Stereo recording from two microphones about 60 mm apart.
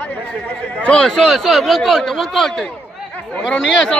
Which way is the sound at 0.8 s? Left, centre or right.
Centre.